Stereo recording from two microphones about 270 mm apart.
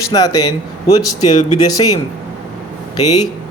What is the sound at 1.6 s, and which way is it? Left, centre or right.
Speech, centre.